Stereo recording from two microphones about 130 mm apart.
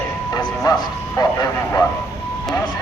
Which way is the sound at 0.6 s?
30° left (ahead or behind).